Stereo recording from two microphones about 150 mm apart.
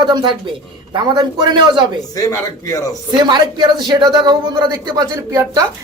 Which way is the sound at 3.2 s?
30° right (ahead or behind).